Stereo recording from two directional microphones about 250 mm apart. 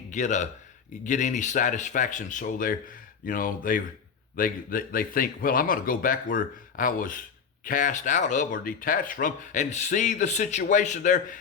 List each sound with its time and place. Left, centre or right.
0.1 s speech: left